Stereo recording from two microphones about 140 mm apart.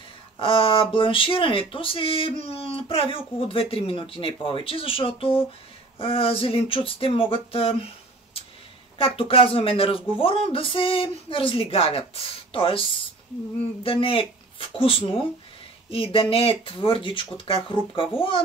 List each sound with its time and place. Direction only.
0.4 s speech: 40° left (ahead or behind)
8.9 s speech: 40° left (ahead or behind)
13.8 s speech: 40° left (ahead or behind)